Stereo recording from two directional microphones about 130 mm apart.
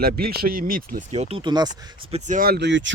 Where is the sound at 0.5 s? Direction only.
90° right.